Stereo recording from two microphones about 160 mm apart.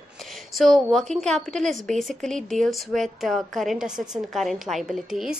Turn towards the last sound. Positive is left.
turn(degrees=0)  # may be behind; listen again after turning